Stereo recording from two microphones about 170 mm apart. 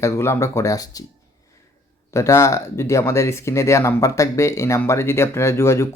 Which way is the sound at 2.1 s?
15° left (ahead or behind).